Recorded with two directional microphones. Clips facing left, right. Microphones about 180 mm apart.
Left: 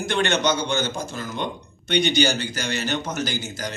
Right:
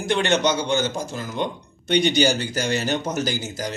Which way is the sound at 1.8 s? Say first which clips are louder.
Right 2 dB; 40° right (ahead or behind).